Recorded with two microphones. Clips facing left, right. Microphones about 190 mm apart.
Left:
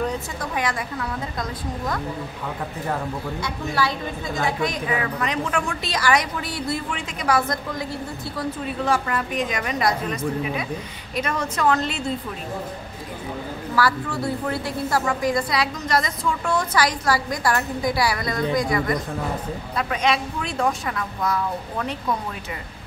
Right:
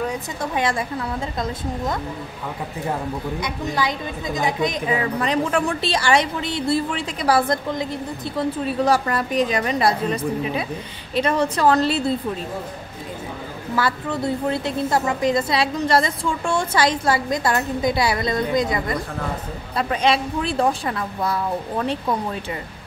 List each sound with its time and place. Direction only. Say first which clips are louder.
0.4 s a woman's voice: right 6 dB; 25° right (ahead or behind)
8.6 s a woman's voice: right 3 dB; 40° right (ahead or behind)
13.7 s a woman's voice: even; 25° right (ahead or behind)